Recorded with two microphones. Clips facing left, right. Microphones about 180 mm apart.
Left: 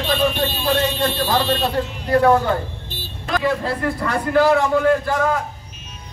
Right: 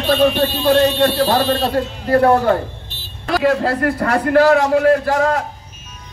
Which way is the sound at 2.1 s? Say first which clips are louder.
Right 2 dB; 65° right (ahead or behind).